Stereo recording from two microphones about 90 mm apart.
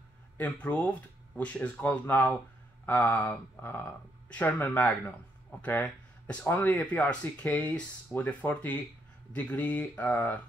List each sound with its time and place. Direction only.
0.4 s speech: 15° left (ahead or behind)